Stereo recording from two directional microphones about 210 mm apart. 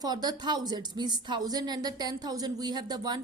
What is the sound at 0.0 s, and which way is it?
A woman's voice, 20° right (ahead or behind).